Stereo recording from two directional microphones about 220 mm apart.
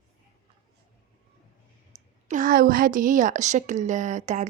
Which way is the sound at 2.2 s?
35° right (ahead or behind).